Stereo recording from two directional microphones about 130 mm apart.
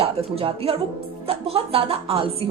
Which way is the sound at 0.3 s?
45° right (ahead or behind).